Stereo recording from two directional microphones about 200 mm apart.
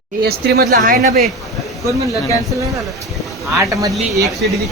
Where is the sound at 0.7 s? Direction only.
40° right (ahead or behind).